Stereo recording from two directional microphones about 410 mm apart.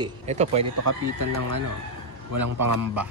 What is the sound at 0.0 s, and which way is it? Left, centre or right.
Speech, centre.